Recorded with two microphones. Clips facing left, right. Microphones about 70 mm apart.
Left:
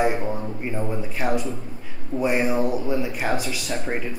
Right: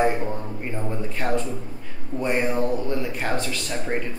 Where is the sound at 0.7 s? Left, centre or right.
Centre.